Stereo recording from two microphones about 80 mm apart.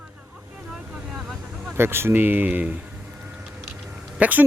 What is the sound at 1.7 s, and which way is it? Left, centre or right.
A man's voice, right.